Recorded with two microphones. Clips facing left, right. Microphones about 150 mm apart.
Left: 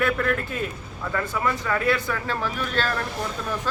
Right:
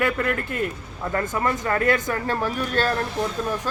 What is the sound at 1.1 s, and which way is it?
Speech, 45° right (ahead or behind).